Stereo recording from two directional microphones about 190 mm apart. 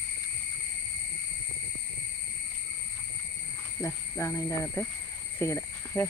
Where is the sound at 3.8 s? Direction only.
15° left (ahead or behind).